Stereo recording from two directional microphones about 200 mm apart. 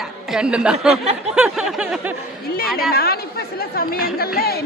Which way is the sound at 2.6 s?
50° left (ahead or behind).